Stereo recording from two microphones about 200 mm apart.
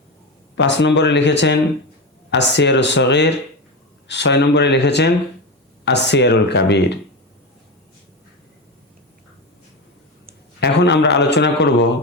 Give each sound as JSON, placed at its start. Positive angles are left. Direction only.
{"t": 0.5, "sound": "a man's voice", "side_deg": 65}
{"t": 10.6, "sound": "a man's voice", "side_deg": 60}